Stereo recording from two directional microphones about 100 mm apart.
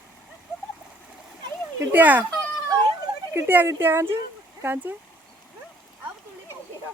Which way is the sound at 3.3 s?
20° right (ahead or behind).